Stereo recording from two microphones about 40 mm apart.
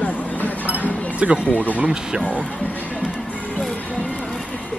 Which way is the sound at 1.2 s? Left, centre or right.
Right.